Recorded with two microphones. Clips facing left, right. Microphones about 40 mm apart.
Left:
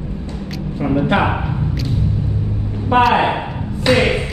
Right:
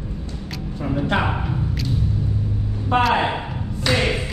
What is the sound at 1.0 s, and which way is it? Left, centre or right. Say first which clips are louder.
Speech: left 4 dB; centre.